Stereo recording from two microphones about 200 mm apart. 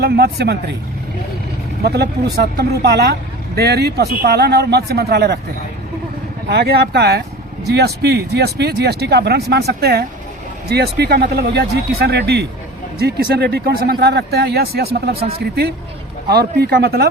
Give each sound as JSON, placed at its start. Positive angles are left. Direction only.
{"t": 0.0, "sound": "speech", "side_deg": -55}
{"t": 1.8, "sound": "speech", "side_deg": -55}
{"t": 6.5, "sound": "speech", "side_deg": -50}
{"t": 16.3, "sound": "speech", "side_deg": -50}